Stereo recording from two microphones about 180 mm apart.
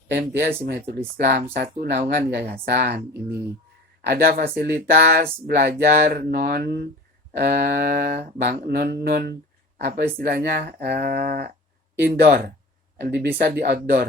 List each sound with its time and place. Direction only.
0.1 s speech: 60° right (ahead or behind)